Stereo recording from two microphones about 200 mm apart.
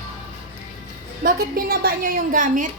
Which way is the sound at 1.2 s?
45° right (ahead or behind).